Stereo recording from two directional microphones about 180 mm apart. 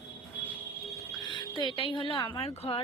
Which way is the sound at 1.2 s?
25° left (ahead or behind).